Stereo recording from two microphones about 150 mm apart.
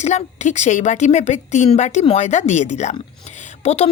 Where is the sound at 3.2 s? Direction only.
50° left (ahead or behind).